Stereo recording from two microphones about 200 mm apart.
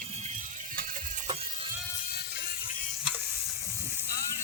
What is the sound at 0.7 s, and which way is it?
Ratchet, 45° right (ahead or behind).